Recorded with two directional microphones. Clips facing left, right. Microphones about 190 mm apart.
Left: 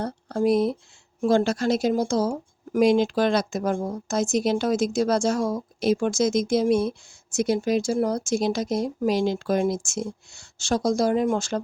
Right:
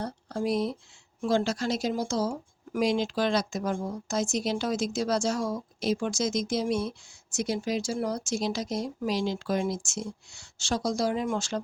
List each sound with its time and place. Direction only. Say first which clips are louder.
0.0 s speech: left 7 dB; 50° left (ahead or behind)